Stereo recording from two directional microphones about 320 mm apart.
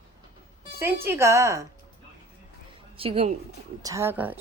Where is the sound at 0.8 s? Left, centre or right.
Centre.